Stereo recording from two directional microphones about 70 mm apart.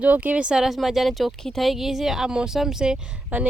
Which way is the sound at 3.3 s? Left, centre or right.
Right.